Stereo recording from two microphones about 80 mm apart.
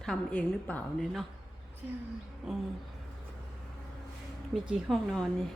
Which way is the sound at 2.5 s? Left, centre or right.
Centre.